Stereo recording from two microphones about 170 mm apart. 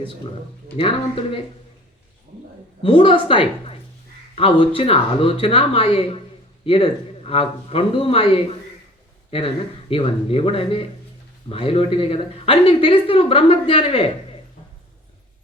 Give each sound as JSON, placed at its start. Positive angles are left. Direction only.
{"t": 0.8, "sound": "speech", "side_deg": 35}
{"t": 2.8, "sound": "speech", "side_deg": 30}
{"t": 9.9, "sound": "speech", "side_deg": 35}